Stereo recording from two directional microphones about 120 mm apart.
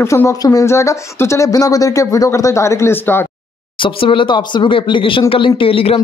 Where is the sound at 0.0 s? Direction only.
25° left (ahead or behind).